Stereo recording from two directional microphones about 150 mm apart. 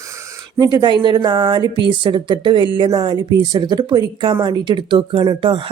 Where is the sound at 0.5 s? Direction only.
30° right (ahead or behind).